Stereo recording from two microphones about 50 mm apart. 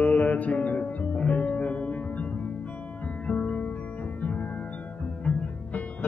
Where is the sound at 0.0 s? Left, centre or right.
Left.